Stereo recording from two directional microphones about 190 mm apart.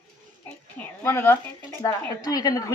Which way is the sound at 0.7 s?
10° left (ahead or behind).